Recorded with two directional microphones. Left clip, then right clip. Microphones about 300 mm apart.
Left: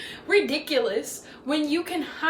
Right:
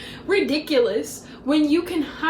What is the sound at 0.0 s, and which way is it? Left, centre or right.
A woman's voice, centre.